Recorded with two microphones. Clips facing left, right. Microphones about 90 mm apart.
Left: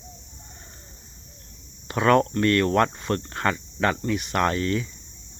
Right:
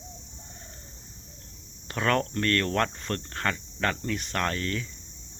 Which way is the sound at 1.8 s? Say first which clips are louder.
Left 7 dB; 15° left (ahead or behind).